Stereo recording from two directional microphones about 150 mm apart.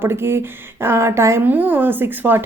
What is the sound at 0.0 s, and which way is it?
A woman's voice, 15° right (ahead or behind).